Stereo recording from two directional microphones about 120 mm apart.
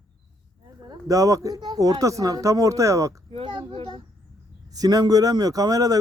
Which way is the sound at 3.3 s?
45° right (ahead or behind).